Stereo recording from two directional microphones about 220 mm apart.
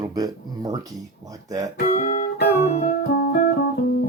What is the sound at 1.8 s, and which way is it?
Music, 40° left (ahead or behind).